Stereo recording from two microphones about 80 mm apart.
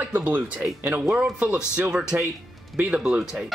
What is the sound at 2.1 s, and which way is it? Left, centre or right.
Speech, right.